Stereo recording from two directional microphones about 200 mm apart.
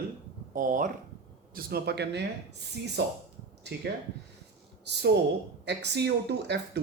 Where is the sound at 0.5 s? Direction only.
40° right (ahead or behind).